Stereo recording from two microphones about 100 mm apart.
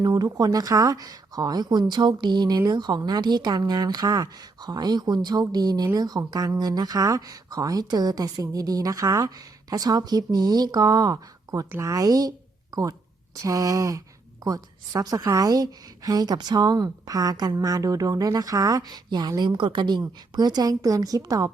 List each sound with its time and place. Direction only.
0.0 s speech: 40° right (ahead or behind)
13.4 s speech: 35° right (ahead or behind)
19.4 s a woman's voice: 55° right (ahead or behind); by 21.5 s 35° right (ahead or behind)